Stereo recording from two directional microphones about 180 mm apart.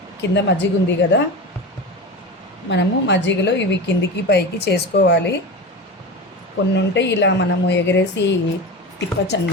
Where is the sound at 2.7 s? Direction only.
75° left (ahead or behind).